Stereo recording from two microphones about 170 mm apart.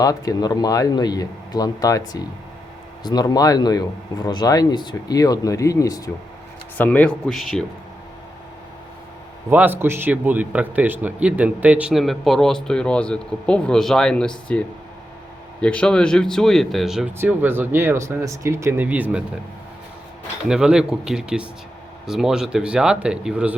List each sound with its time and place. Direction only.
0.0 s speech: 20° left (ahead or behind); by 7.6 s centre (ahead or behind)
9.5 s a man's voice: 10° right (ahead or behind); by 14.6 s 5° left (ahead or behind)
15.6 s a man's voice: 5° left (ahead or behind)
20.5 s a man's voice: 5° right (ahead or behind)